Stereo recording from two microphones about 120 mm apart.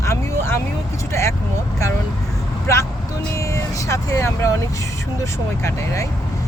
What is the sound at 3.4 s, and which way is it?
Speech, 25° left (ahead or behind).